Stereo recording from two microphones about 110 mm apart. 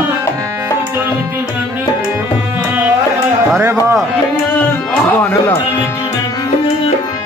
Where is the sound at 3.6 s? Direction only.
25° right (ahead or behind).